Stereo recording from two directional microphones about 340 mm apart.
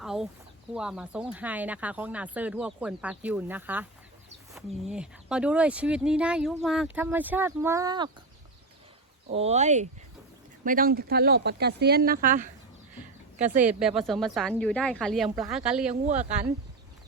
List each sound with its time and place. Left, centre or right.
0.0 s a sound: centre
0.7 s speech: centre
9.3 s speech: centre
13.7 s speech: centre
16.0 s speech: centre